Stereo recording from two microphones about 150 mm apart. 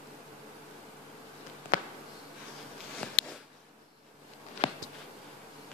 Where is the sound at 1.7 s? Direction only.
65° left (ahead or behind).